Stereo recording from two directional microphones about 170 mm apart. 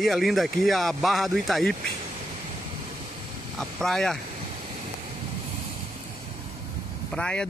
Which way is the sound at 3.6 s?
5° left (ahead or behind).